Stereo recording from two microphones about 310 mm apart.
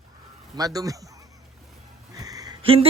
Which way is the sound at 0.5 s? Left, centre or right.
Centre.